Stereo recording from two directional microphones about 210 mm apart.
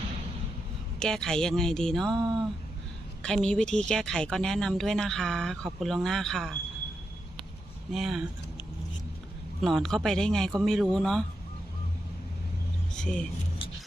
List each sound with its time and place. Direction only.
0.9 s a woman's voice: 5° left (ahead or behind)
2.1 s a sound: 20° right (ahead or behind)
3.2 s a woman's voice: 5° left (ahead or behind)
7.9 s a woman's voice: centre (ahead or behind)
9.6 s a woman's voice: centre (ahead or behind)
12.9 s speech: 5° left (ahead or behind)